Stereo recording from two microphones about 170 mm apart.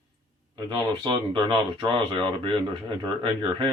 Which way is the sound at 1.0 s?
30° right (ahead or behind).